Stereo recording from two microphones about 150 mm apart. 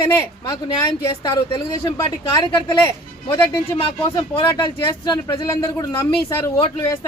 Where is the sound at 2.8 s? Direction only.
15° left (ahead or behind).